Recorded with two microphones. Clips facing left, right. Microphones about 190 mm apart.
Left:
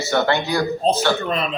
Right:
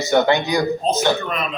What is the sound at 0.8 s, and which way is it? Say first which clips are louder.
Speech: left 2 dB; 30° left (ahead or behind).